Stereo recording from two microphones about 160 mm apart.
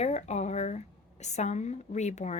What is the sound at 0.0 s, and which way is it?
Speech, 45° left (ahead or behind).